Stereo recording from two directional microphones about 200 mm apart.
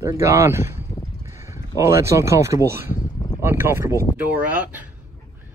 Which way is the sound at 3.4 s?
10° right (ahead or behind).